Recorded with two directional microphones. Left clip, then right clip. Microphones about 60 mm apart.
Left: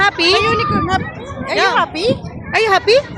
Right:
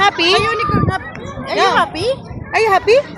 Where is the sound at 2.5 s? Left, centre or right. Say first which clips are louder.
Even; centre.